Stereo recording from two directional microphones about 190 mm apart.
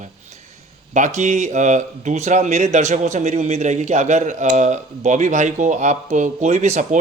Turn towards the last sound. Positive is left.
turn(degrees=-40)  # may be behind; listen again after turning